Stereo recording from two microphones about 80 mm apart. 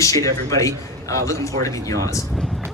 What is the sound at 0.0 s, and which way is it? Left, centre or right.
Speech, left.